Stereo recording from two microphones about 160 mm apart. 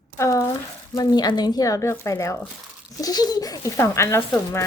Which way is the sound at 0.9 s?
25° left (ahead or behind).